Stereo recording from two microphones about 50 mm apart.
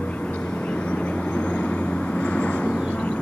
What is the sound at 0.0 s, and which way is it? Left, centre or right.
Vehicle, left.